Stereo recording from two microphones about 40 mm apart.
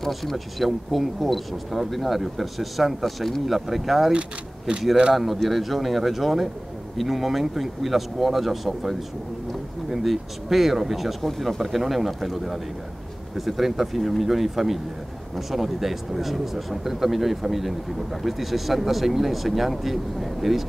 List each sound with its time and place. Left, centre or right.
0.0 s speech: centre
4.1 s speech: right
5.1 s speech: centre